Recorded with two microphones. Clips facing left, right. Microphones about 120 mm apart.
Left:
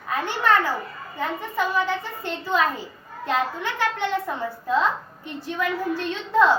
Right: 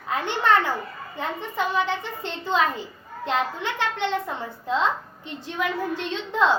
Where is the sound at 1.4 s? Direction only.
20° right (ahead or behind).